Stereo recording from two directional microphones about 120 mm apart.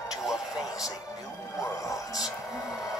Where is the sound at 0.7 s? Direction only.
30° left (ahead or behind).